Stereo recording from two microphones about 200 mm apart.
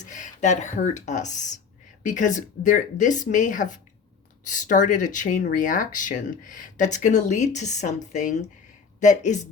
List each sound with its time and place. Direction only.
0.0 s speech: 35° left (ahead or behind)